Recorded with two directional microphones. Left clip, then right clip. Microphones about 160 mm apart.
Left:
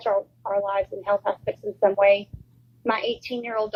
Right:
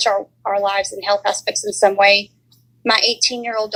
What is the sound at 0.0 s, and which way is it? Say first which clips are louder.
A woman's voice: right 6 dB; 45° right (ahead or behind).